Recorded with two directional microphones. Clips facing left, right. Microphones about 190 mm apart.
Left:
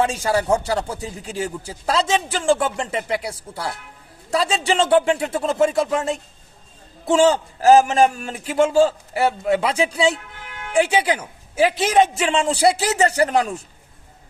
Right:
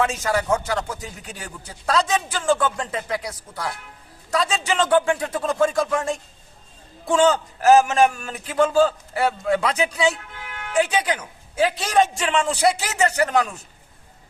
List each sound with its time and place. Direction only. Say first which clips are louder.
0.0 s a man's voice: left 2 dB; 30° left (ahead or behind)